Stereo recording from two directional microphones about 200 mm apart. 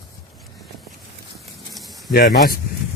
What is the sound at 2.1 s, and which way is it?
Speech, 45° left (ahead or behind).